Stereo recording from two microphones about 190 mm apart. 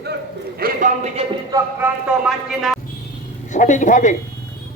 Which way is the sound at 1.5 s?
10° right (ahead or behind).